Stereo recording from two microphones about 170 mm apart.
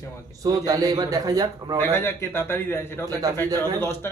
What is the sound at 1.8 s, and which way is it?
A man's voice, 15° left (ahead or behind).